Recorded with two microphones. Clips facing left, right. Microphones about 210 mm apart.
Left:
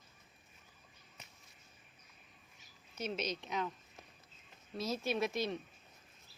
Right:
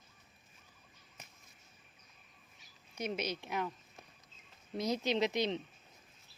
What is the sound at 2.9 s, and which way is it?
Speech, 10° right (ahead or behind).